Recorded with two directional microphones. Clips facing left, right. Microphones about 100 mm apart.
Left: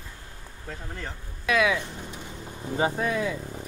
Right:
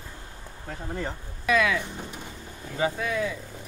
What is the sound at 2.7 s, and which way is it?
Speech, 30° left (ahead or behind).